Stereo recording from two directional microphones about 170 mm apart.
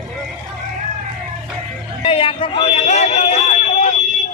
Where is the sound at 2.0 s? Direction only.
35° left (ahead or behind).